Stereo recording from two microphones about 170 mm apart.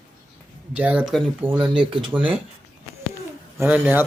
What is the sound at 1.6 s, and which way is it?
Speech, 30° right (ahead or behind).